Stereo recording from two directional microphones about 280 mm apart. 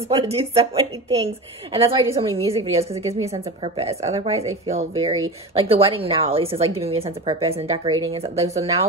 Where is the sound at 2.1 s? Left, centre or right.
Right.